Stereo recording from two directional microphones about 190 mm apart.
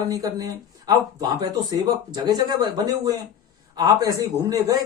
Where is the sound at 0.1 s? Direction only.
20° right (ahead or behind).